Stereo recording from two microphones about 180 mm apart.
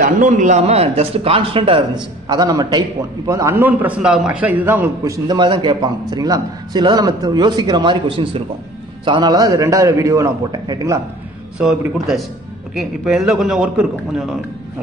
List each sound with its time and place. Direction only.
0.0 s a man's voice: 45° right (ahead or behind); by 11.0 s 20° right (ahead or behind)
11.5 s a man's voice: 5° right (ahead or behind)